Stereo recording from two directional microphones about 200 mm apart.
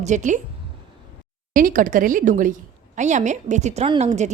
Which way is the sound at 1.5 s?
40° right (ahead or behind).